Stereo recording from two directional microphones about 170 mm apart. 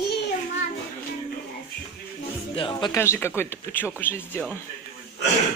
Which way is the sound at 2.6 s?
30° left (ahead or behind).